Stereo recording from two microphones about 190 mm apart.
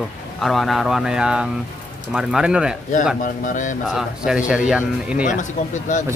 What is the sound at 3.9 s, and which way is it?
Speech, centre (ahead or behind).